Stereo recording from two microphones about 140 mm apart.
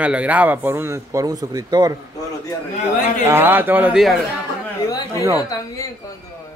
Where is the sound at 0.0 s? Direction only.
10° right (ahead or behind); by 2.0 s 25° right (ahead or behind).